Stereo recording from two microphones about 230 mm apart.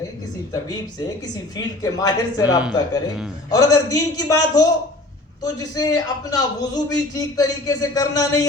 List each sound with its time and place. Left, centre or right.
0.5 s a man's voice: centre